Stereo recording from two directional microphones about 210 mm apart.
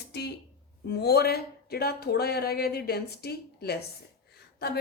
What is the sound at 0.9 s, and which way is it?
A woman's voice, 50° left (ahead or behind).